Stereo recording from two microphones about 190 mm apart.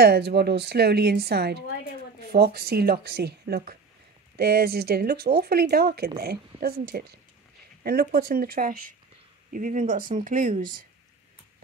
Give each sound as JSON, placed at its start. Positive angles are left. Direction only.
{"t": 0.0, "sound": "speech", "side_deg": -60}